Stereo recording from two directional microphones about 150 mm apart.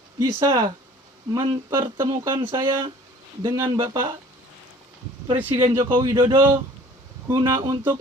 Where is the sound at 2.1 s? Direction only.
25° right (ahead or behind).